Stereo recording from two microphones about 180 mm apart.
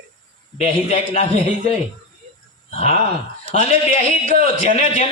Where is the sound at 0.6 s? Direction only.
35° left (ahead or behind).